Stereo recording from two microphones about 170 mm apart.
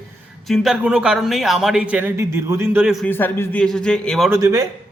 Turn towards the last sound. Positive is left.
turn(degrees=-15)  # may be behind; listen again after turning